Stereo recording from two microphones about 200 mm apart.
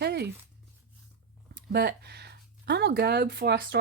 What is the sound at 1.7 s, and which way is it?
Speech, 55° right (ahead or behind).